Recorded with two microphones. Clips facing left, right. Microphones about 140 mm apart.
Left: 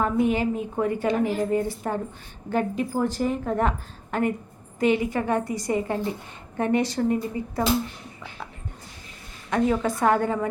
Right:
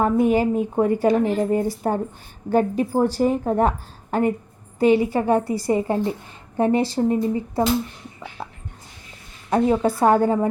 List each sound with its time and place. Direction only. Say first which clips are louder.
0.0 s a woman's voice: right 4 dB; 40° right (ahead or behind)
9.5 s a woman's voice: right 4 dB; 30° right (ahead or behind)